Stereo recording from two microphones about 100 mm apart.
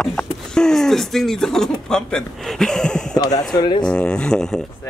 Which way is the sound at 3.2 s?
40° left (ahead or behind).